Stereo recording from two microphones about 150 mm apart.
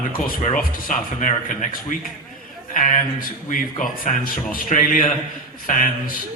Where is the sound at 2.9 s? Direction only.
55° left (ahead or behind).